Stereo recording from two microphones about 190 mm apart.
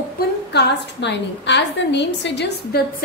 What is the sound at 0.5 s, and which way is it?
A woman's voice, 65° left (ahead or behind).